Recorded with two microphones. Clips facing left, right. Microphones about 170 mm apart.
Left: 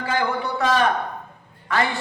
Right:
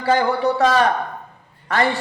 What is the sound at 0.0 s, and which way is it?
A man's voice, 40° right (ahead or behind).